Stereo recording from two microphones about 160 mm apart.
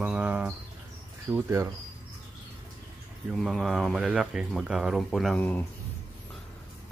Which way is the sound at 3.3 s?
Centre (ahead or behind).